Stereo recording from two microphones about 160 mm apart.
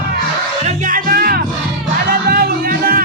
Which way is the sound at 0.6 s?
55° right (ahead or behind).